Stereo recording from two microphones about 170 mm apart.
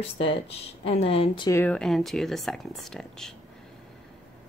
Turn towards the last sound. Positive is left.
turn(degrees=5)  # may be behind; listen again after turning